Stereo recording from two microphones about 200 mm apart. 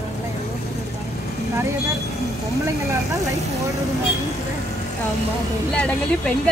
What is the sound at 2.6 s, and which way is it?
Speech, 15° right (ahead or behind).